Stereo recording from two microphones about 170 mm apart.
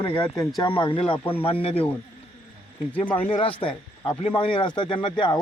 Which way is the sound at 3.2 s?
30° left (ahead or behind).